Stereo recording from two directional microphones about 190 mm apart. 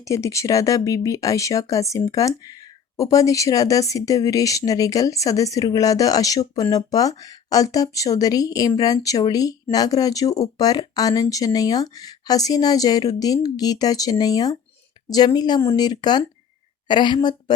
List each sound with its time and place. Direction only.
0.0 s speech: 15° left (ahead or behind)